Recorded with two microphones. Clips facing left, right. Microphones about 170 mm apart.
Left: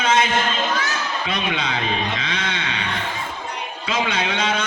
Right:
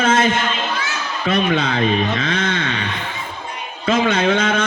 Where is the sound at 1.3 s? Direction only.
50° right (ahead or behind).